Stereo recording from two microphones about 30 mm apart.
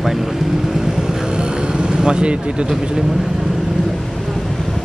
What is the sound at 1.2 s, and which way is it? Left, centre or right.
Vehicle, right.